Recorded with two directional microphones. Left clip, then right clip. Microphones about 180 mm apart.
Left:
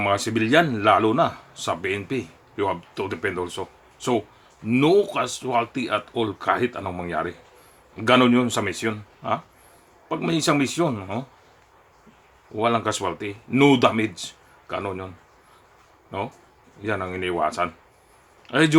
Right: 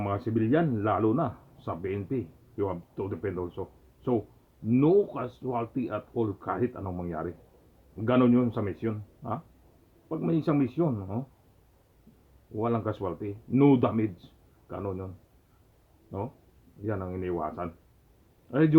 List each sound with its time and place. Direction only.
0.0 s speech: 15° left (ahead or behind)
12.5 s speech: 10° left (ahead or behind)
16.8 s speech: 15° left (ahead or behind)